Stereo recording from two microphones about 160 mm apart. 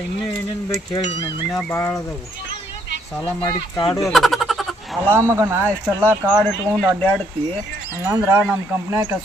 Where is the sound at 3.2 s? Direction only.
25° left (ahead or behind).